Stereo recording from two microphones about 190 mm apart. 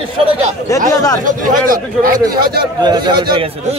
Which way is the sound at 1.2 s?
45° right (ahead or behind).